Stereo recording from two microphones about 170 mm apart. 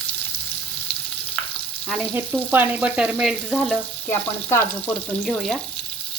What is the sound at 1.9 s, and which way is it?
Frying, 10° right (ahead or behind).